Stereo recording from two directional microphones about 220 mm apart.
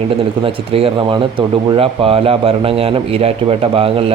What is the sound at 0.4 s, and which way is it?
A man's voice, 25° right (ahead or behind).